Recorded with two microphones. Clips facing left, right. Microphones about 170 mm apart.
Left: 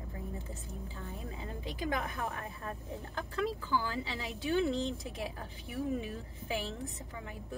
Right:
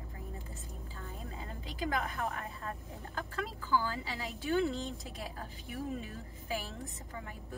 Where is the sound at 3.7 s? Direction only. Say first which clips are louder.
Right 1 dB; 20° left (ahead or behind).